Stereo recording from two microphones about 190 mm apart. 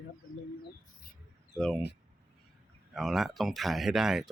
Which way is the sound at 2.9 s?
Centre (ahead or behind).